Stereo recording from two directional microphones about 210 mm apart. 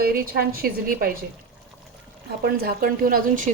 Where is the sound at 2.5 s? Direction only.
45° right (ahead or behind).